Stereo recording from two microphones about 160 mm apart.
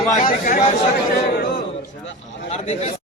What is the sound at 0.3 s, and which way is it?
Speech, 60° left (ahead or behind).